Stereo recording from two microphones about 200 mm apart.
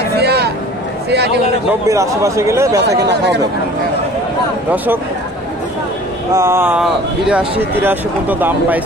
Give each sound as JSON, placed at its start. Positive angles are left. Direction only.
{"t": 0.2, "sound": "a sound", "side_deg": -55}
{"t": 1.1, "sound": "a man's voice", "side_deg": -55}
{"t": 1.7, "sound": "speech", "side_deg": -15}
{"t": 6.3, "sound": "speech", "side_deg": -15}